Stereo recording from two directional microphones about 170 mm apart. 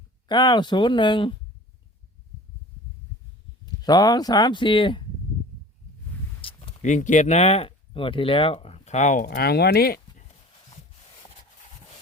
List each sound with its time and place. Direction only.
0.3 s speech: 25° left (ahead or behind)
3.8 s speech: 25° left (ahead or behind)
6.4 s a sound: 30° left (ahead or behind)
6.8 s speech: 45° left (ahead or behind)
9.3 s speech: 70° left (ahead or behind)